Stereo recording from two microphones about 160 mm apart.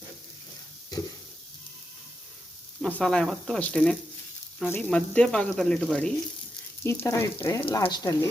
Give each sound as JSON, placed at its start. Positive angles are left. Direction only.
{"t": 2.8, "sound": "speech", "side_deg": 5}
{"t": 6.8, "sound": "frying", "side_deg": 15}
{"t": 7.7, "sound": "speech", "side_deg": 25}